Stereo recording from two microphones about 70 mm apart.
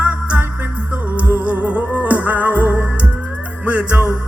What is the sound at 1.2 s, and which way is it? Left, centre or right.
Music, right.